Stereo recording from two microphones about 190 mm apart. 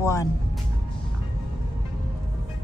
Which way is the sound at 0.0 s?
15° left (ahead or behind).